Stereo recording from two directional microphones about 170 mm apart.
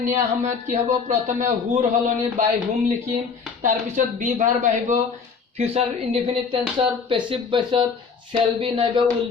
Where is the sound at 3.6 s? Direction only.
50° right (ahead or behind).